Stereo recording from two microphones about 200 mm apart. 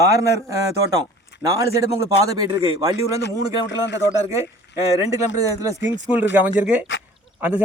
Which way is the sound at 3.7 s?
65° left (ahead or behind).